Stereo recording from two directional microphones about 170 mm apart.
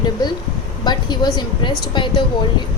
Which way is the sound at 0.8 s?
25° left (ahead or behind).